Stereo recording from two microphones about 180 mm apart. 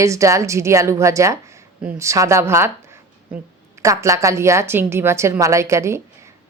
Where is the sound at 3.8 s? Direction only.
15° right (ahead or behind).